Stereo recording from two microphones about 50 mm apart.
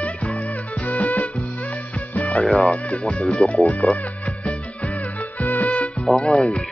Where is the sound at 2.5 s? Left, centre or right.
Left.